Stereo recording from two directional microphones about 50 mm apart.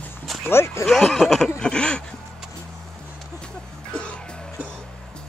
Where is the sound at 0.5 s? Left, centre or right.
Left.